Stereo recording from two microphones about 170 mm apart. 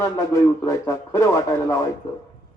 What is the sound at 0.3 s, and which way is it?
Speech, 20° left (ahead or behind).